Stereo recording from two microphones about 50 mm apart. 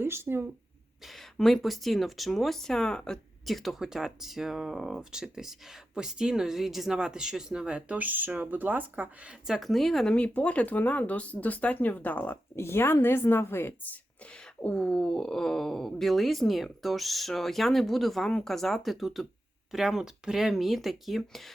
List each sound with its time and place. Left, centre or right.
0.0 s speech: right
1.0 s speech: centre
3.4 s speech: centre; by 9.0 s right
9.5 s speech: centre
10.2 s speech: left
12.5 s speech: left
14.3 s speech: left; by 21.5 s centre